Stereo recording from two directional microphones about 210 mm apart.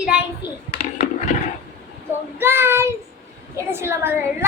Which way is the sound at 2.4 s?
10° right (ahead or behind).